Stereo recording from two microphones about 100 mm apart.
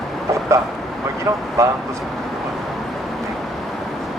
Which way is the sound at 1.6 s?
30° right (ahead or behind).